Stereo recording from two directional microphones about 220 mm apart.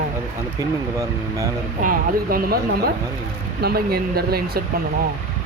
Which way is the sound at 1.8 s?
40° right (ahead or behind).